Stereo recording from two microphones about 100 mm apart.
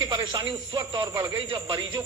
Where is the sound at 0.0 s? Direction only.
50° right (ahead or behind).